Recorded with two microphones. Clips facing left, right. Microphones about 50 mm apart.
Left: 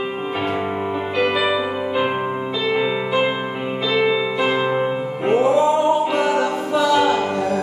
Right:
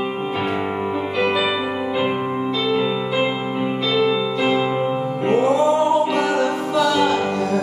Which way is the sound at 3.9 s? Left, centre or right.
Centre.